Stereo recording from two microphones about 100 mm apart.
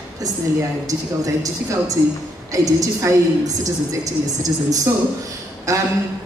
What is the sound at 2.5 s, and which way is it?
A woman's voice, 35° right (ahead or behind).